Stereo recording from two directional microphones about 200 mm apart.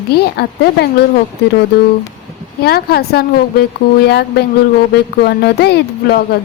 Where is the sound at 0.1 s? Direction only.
50° left (ahead or behind).